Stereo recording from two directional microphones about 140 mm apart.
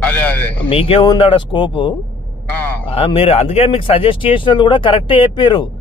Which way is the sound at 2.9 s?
40° left (ahead or behind).